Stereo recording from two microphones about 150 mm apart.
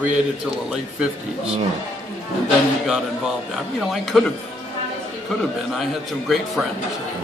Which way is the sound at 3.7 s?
Centre (ahead or behind).